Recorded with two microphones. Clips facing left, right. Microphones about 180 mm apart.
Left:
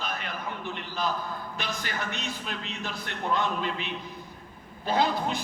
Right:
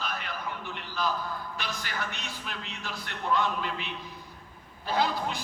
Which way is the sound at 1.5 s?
20° left (ahead or behind).